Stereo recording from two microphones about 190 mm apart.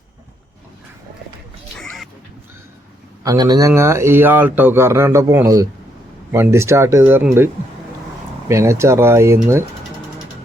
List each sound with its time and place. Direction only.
3.2 s a man's voice: 20° right (ahead or behind)
8.4 s a man's voice: 15° right (ahead or behind)